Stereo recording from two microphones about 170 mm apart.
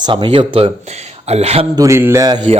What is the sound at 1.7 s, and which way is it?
Speech, 15° right (ahead or behind).